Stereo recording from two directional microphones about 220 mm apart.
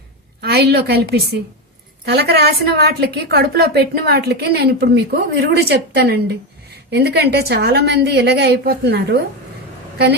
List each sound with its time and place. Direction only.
0.4 s a woman's voice: 50° right (ahead or behind)